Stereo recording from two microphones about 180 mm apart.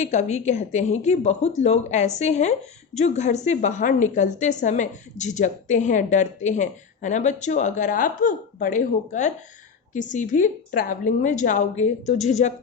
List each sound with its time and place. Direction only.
0.0 s a woman's voice: 40° left (ahead or behind)